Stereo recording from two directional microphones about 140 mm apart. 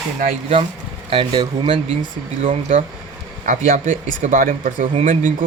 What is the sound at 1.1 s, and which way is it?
Speech, 40° right (ahead or behind).